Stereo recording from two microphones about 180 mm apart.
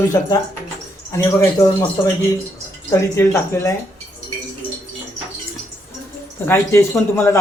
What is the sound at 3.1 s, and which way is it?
Speech, 15° left (ahead or behind).